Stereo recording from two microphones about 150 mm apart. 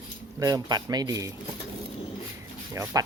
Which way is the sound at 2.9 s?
20° right (ahead or behind).